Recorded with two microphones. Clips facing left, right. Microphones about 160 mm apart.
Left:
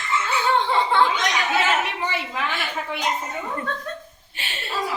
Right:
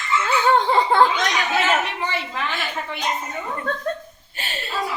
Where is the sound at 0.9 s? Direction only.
45° right (ahead or behind).